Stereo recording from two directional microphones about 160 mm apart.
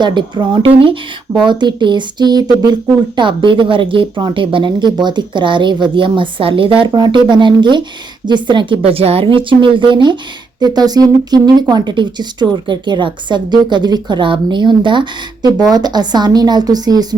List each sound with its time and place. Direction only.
0.0 s a woman's voice: 30° right (ahead or behind)